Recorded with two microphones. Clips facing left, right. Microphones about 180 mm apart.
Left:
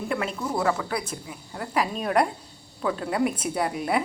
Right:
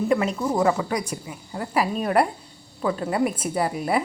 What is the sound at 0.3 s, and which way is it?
A woman's voice, 10° right (ahead or behind).